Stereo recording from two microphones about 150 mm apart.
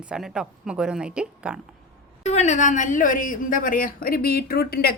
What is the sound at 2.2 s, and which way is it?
A woman's voice, 50° left (ahead or behind).